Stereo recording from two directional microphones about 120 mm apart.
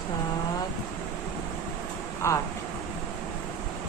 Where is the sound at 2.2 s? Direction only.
25° left (ahead or behind).